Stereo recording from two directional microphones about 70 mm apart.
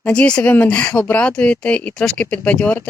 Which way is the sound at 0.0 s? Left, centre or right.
Centre.